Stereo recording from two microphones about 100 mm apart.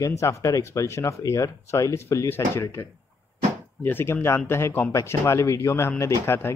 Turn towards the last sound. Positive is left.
turn(degrees=25)  # may be behind; listen again after turning